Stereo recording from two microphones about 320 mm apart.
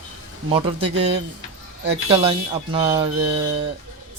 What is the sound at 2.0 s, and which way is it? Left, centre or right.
A man's voice, centre.